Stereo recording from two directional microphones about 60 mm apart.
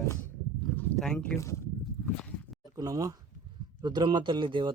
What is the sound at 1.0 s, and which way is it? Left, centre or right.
Speech, centre.